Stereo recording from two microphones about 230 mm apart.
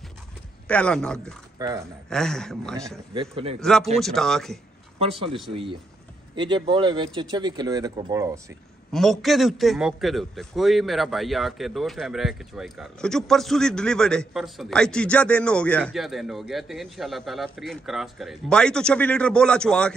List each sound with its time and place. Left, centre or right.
0.7 s a man's voice: centre
1.6 s speech: centre
2.0 s a man's voice: centre
3.2 s speech: right
4.0 s a man's voice: centre
5.5 s speech: right
8.9 s a man's voice: centre